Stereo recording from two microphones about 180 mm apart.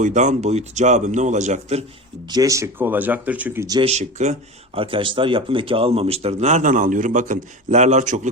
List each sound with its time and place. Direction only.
0.0 s speech: 40° right (ahead or behind)
2.3 s speech: 20° right (ahead or behind)
3.8 s speech: 35° right (ahead or behind)